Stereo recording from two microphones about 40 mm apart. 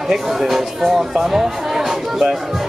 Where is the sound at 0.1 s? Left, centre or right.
Centre.